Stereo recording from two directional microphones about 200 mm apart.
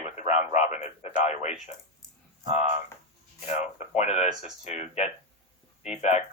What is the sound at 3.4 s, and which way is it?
A man's voice, 35° left (ahead or behind).